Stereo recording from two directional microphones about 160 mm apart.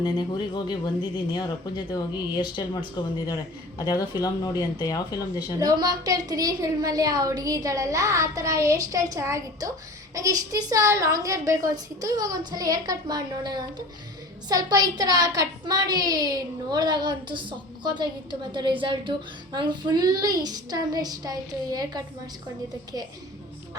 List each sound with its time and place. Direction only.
0.0 s speech: 30° left (ahead or behind)
5.5 s a child's voice: 25° right (ahead or behind)